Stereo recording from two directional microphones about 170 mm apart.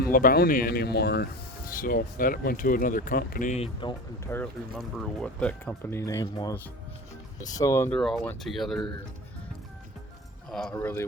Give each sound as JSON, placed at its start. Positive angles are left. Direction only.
{"t": 0.0, "sound": "speech", "side_deg": 55}
{"t": 1.7, "sound": "speech", "side_deg": 55}
{"t": 4.3, "sound": "speech", "side_deg": 10}
{"t": 4.7, "sound": "speech", "side_deg": 0}
{"t": 7.9, "sound": "speech", "side_deg": 0}
{"t": 10.5, "sound": "speech", "side_deg": 5}